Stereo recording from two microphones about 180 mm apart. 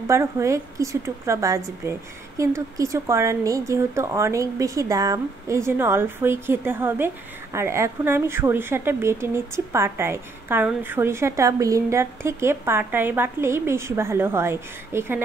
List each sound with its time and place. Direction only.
0.1 s speech: 15° right (ahead or behind)